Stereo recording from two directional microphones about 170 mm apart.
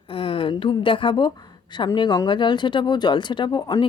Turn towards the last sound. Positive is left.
turn(degrees=25)  # may be behind; listen again after turning